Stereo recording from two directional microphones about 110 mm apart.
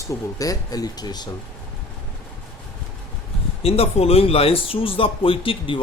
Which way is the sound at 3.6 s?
65° left (ahead or behind).